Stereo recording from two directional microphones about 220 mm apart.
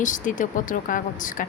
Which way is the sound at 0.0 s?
35° left (ahead or behind).